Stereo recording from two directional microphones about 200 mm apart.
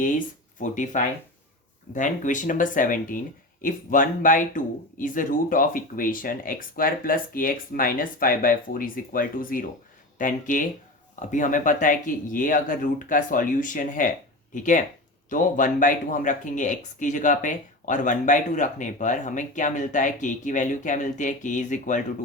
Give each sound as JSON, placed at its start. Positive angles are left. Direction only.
{"t": 0.6, "sound": "speech", "side_deg": 40}